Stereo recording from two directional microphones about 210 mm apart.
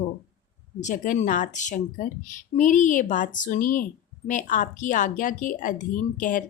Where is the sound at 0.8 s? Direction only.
35° left (ahead or behind).